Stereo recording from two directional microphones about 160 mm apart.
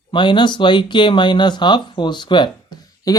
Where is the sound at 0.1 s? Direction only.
30° left (ahead or behind).